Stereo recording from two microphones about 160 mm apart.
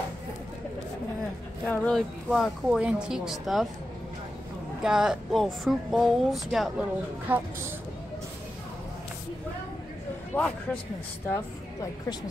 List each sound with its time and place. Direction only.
1.7 s speech: 5° left (ahead or behind)
4.8 s speech: 5° right (ahead or behind)
10.3 s speech: 10° left (ahead or behind)